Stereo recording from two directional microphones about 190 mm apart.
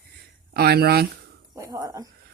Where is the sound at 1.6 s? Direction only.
15° right (ahead or behind).